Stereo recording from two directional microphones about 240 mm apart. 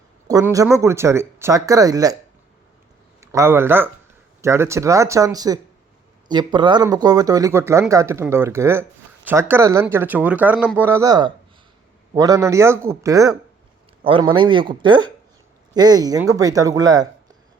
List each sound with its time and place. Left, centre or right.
0.3 s speech: centre
3.2 s a man's voice: centre